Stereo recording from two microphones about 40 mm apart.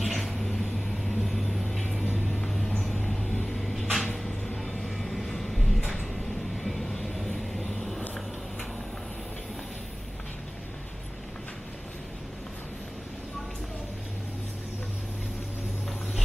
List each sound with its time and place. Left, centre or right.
0.0 s vehicle: centre
3.5 s a sound: centre
4.6 s vehicle: centre